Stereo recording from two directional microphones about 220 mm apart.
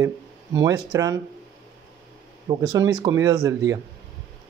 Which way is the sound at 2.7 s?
15° right (ahead or behind).